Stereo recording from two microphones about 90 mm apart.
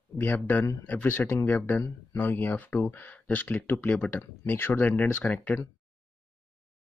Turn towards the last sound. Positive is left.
turn(degrees=20)  # may be behind; listen again after turning